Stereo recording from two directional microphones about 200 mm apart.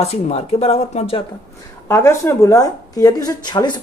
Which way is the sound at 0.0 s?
30° left (ahead or behind).